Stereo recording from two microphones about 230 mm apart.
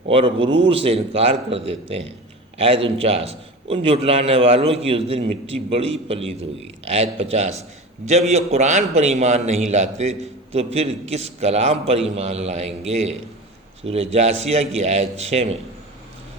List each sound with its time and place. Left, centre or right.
0.1 s a man's voice: right